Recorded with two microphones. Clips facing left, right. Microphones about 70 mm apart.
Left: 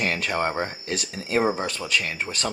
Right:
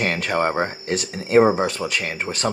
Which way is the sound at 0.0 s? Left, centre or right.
Right.